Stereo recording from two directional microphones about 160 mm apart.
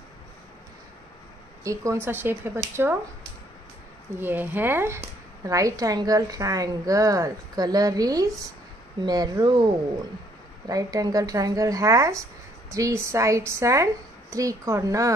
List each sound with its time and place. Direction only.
1.6 s speech: 20° right (ahead or behind)
4.2 s a woman's voice: 10° right (ahead or behind)
10.7 s a woman's voice: 20° right (ahead or behind)